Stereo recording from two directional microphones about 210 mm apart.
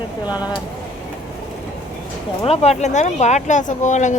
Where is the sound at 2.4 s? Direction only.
30° left (ahead or behind).